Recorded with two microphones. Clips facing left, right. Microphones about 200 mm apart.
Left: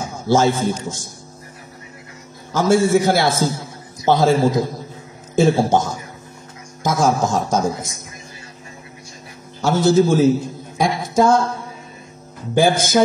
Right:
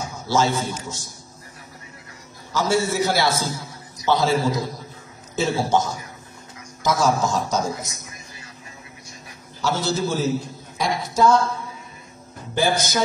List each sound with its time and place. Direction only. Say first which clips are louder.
0.3 s a man's voice: left 5 dB; 50° left (ahead or behind)
2.5 s a man's voice: left 7 dB; 50° left (ahead or behind)
9.6 s a man's voice: left 9 dB; 50° left (ahead or behind)
12.5 s a man's voice: left 6 dB; 50° left (ahead or behind)